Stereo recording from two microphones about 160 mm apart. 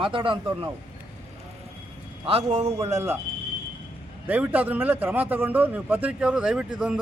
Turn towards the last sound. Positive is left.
turn(degrees=-5)  # may be behind; listen again after turning